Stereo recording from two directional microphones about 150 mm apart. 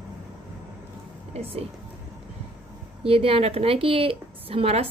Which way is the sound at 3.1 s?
40° right (ahead or behind).